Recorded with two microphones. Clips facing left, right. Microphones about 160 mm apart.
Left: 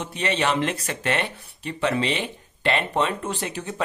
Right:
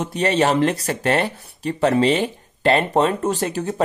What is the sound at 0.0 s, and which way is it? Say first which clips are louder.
Speech: right 6 dB; 40° right (ahead or behind).